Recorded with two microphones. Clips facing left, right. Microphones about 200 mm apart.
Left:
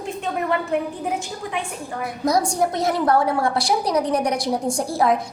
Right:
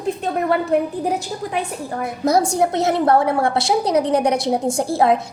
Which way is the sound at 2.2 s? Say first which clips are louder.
Right 3 dB; 25° right (ahead or behind).